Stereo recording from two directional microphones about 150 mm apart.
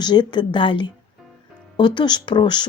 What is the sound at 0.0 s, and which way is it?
Speech, 30° left (ahead or behind).